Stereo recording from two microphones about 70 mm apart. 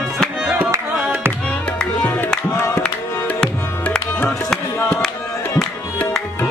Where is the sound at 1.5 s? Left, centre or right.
Centre.